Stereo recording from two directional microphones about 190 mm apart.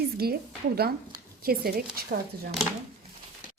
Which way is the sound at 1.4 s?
50° right (ahead or behind).